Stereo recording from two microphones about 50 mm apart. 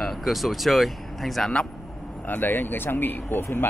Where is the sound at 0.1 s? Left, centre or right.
Centre.